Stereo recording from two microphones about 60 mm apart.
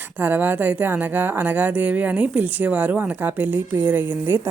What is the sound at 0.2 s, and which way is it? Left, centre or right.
A woman's voice, right.